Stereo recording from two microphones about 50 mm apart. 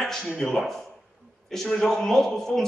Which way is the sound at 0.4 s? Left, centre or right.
Centre.